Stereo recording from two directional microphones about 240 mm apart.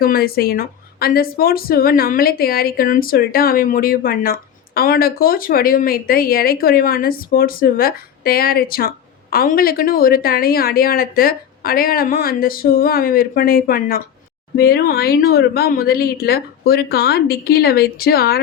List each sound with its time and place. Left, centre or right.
0.0 s a woman's voice: left